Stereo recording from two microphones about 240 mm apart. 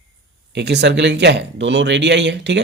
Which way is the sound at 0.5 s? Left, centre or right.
Right.